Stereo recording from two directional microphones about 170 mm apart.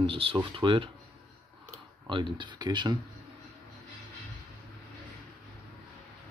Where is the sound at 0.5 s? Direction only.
30° right (ahead or behind).